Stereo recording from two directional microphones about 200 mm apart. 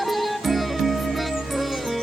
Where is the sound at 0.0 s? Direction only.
Centre (ahead or behind).